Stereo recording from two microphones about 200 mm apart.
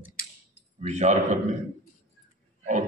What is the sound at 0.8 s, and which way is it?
Speech, 35° right (ahead or behind).